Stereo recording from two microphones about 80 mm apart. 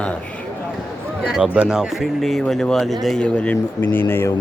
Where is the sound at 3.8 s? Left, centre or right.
Left.